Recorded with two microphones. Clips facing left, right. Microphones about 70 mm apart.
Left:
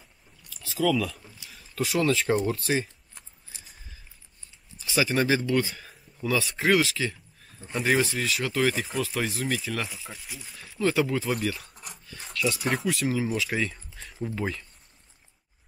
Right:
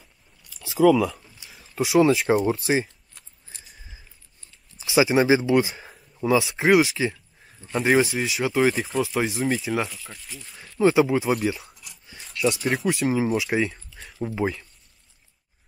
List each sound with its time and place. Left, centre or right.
0.5 s speech: centre
4.7 s speech: centre
9.8 s speech: centre
10.8 s speech: centre
11.7 s dog: left
12.5 s speech: centre
12.8 s speech: centre